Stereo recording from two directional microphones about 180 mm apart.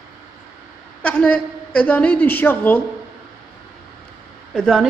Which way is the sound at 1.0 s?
10° left (ahead or behind).